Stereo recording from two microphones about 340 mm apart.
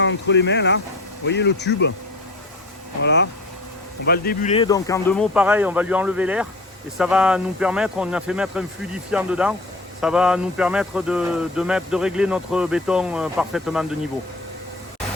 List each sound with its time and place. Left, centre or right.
0.0 s speech: left
3.0 s speech: left; by 14.1 s centre